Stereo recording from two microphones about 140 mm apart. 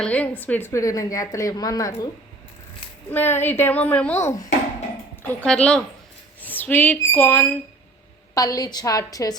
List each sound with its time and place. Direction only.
0.0 s a woman's voice: 10° left (ahead or behind); by 2.0 s 25° left (ahead or behind)
3.1 s a woman's voice: 15° left (ahead or behind)
5.3 s a woman's voice: 10° left (ahead or behind)
8.4 s a woman's voice: 25° left (ahead or behind)